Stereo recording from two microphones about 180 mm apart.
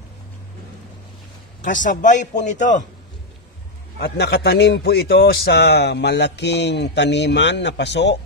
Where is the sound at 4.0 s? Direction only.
65° left (ahead or behind).